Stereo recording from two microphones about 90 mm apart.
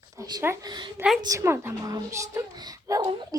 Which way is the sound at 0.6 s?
55° right (ahead or behind).